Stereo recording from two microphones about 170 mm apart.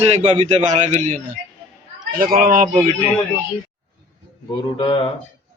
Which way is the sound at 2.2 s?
55° right (ahead or behind).